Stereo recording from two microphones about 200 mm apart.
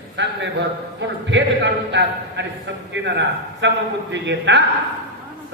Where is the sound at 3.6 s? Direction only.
60° right (ahead or behind).